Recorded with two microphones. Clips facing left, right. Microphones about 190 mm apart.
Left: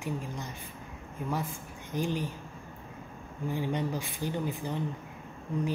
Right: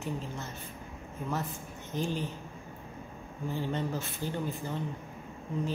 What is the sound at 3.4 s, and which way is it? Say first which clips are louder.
Speech: left 2 dB; 15° left (ahead or behind).